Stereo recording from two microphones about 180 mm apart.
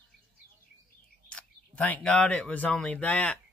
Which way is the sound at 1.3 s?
10° left (ahead or behind).